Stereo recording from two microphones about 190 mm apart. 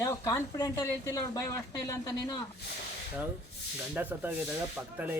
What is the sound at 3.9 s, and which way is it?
Speech, 10° right (ahead or behind).